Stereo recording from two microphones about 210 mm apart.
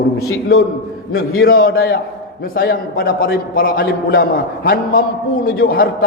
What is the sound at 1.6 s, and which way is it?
A man's voice, 45° left (ahead or behind).